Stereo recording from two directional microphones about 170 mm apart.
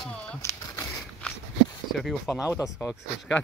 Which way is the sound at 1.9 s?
Centre (ahead or behind).